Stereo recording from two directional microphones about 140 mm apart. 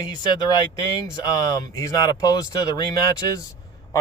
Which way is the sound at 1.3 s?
25° left (ahead or behind).